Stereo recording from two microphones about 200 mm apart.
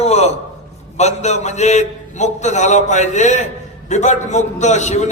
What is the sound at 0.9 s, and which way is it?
A man's voice, 35° left (ahead or behind).